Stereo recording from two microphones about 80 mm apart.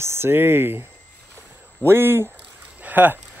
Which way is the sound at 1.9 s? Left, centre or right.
Right.